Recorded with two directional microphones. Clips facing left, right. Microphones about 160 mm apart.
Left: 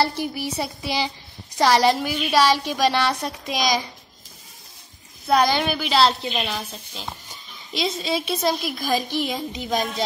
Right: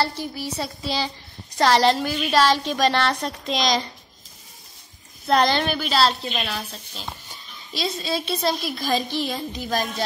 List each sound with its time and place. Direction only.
0.0 s a woman's voice: 10° left (ahead or behind)
5.2 s a woman's voice: 5° left (ahead or behind)